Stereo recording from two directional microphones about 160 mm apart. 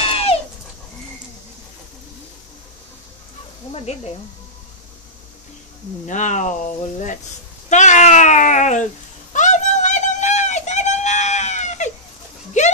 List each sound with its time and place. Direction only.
0.0 s goat: 40° left (ahead or behind)
3.7 s speech: 40° left (ahead or behind)
6.0 s speech: 50° left (ahead or behind)
9.3 s a sound: 50° left (ahead or behind)